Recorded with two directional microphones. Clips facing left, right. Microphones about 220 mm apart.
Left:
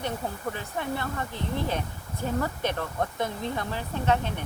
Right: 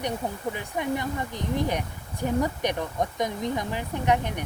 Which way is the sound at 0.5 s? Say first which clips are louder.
Right 3 dB; 15° right (ahead or behind).